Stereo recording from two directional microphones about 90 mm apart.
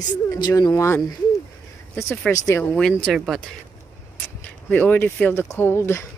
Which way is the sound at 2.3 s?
35° left (ahead or behind).